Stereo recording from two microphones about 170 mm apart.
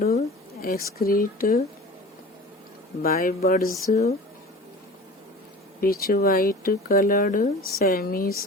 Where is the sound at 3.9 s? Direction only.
40° left (ahead or behind).